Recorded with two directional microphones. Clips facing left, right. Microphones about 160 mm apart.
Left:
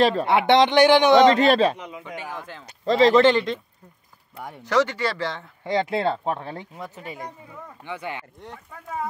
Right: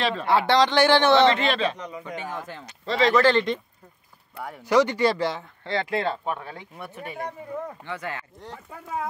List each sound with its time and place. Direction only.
0.0 s speech: 35° left (ahead or behind)
0.3 s a man's voice: 20° left (ahead or behind)
1.3 s speech: 40° left (ahead or behind)
2.0 s speech: centre (ahead or behind)
2.8 s speech: 40° left (ahead or behind)
4.6 s speech: 15° right (ahead or behind)
5.6 s speech: 15° left (ahead or behind)
5.9 s speech: 30° left (ahead or behind)
7.8 s a man's voice: 15° left (ahead or behind)